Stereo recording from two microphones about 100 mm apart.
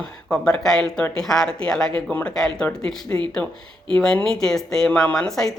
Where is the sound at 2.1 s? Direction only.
15° left (ahead or behind).